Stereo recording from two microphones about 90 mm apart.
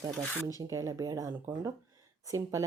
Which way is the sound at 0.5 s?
40° right (ahead or behind).